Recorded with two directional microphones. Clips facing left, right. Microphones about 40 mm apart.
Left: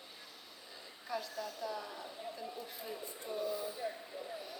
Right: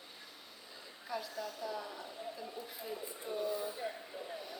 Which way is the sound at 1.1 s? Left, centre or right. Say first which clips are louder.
Even; centre.